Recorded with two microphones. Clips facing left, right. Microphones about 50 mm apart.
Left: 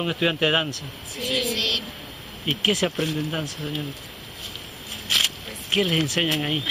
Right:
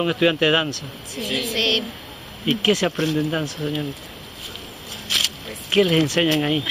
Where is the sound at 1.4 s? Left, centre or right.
Right.